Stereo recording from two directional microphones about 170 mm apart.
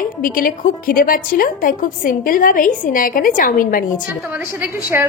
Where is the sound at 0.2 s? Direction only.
55° left (ahead or behind).